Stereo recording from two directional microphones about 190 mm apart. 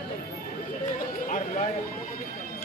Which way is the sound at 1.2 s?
45° left (ahead or behind).